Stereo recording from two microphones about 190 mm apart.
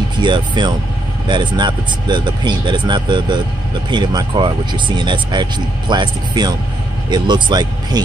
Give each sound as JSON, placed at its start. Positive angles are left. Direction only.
{"t": 0.2, "sound": "speech", "side_deg": -25}